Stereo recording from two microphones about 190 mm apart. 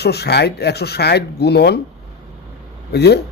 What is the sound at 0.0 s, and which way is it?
Speech, 60° left (ahead or behind).